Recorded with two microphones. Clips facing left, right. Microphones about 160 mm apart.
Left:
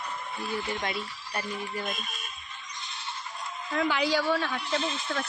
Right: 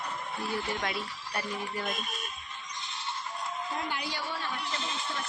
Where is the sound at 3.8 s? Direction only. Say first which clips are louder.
Left 9 dB; 90° left.